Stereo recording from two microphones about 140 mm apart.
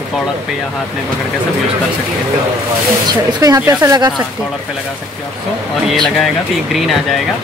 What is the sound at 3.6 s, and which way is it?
Speech, 20° right (ahead or behind).